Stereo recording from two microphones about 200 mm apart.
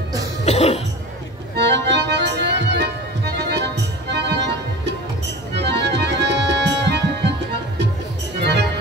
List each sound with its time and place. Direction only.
0.5 s cough: 30° left (ahead or behind)
1.6 s music: 60° right (ahead or behind)
5.6 s music: 60° right (ahead or behind)
8.4 s music: 55° right (ahead or behind)